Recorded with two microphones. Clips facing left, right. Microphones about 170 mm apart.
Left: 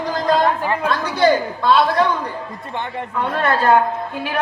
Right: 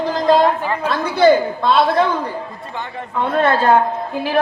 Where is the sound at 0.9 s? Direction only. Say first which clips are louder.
Right 4 dB; 25° right (ahead or behind).